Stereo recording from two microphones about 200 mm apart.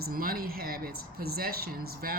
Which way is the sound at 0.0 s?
45° right (ahead or behind).